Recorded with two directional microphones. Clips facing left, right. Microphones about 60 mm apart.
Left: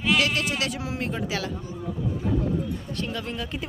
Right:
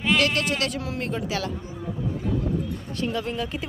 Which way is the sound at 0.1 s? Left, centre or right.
Centre.